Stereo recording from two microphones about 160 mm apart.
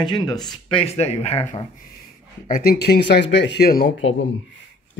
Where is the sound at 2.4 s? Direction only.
60° left (ahead or behind).